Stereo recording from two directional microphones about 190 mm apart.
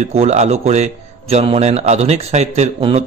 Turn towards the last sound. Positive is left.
turn(degrees=-30)  # may be behind; listen again after turning